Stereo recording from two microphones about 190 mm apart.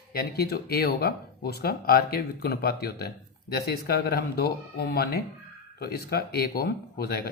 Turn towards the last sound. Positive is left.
turn(degrees=55)  # may be behind; listen again after turning